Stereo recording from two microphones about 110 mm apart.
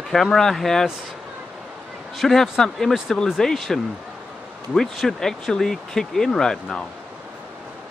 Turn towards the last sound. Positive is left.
turn(degrees=5)  # may be behind; listen again after turning